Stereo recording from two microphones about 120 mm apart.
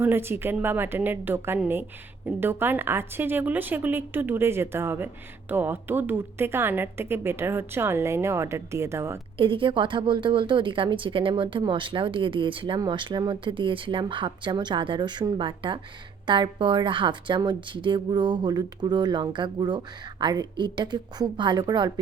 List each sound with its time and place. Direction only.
0.0 s a woman's voice: 20° right (ahead or behind)
9.4 s a woman's voice: 45° right (ahead or behind)